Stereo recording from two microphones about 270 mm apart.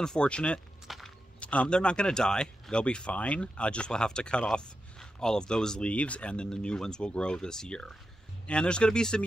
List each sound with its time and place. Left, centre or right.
0.0 s speech: centre